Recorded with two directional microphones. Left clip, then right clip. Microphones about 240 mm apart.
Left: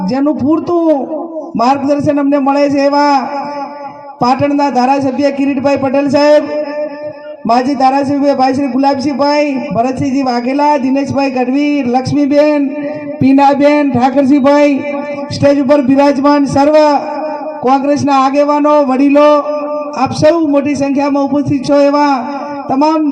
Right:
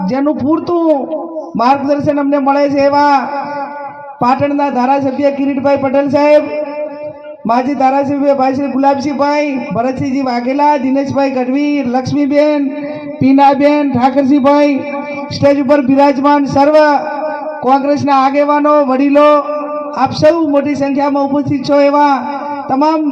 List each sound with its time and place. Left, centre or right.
0.1 s a man's voice: left
4.3 s a man's voice: left
7.4 s a man's voice: left